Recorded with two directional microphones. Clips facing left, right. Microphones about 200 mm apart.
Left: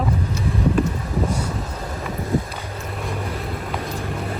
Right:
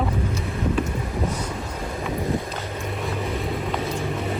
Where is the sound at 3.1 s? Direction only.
Centre (ahead or behind).